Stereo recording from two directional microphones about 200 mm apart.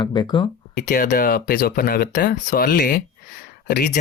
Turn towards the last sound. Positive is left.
turn(degrees=45)  # may be behind; listen again after turning